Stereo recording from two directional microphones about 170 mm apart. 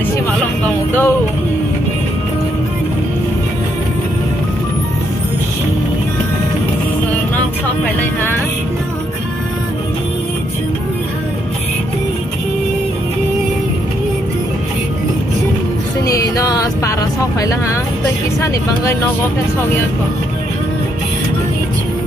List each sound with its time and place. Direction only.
0.7 s music: 10° left (ahead or behind)
8.0 s music: 10° left (ahead or behind)
16.1 s vehicle: 20° left (ahead or behind)
18.4 s speech: 15° left (ahead or behind)